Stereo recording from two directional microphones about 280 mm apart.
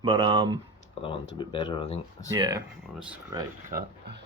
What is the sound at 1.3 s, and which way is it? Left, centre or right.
Speech, centre.